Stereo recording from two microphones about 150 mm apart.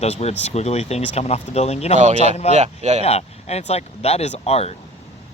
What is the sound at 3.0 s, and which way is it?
Speech, 45° left (ahead or behind).